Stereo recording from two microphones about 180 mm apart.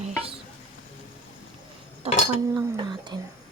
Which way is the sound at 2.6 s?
25° right (ahead or behind).